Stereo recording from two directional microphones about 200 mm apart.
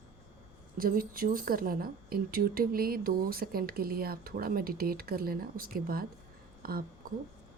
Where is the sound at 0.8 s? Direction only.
45° right (ahead or behind).